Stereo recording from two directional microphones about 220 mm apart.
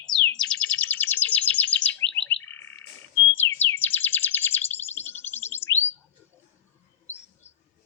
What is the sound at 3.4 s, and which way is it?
Bird, 10° left (ahead or behind).